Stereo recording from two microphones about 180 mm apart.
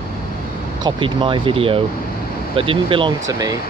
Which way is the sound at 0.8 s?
25° right (ahead or behind).